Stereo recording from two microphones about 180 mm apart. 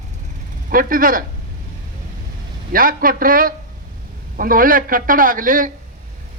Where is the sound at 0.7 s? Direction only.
50° right (ahead or behind).